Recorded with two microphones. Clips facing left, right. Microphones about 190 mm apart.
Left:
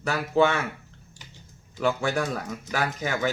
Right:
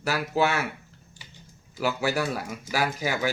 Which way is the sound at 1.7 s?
5° right (ahead or behind).